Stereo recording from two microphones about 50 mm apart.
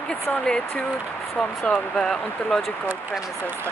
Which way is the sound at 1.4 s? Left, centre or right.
Centre.